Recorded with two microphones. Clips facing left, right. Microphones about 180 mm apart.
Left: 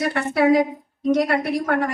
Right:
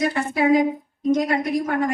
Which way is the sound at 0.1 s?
65° left (ahead or behind).